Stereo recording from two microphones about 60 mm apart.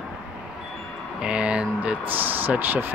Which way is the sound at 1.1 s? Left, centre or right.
Centre.